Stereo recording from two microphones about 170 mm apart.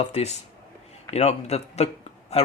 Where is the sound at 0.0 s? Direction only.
40° left (ahead or behind).